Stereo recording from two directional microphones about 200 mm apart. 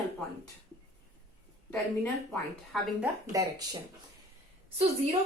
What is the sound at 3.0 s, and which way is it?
Speech, 15° right (ahead or behind).